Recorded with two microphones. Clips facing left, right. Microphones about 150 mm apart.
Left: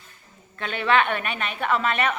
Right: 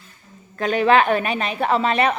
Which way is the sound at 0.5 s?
40° right (ahead or behind).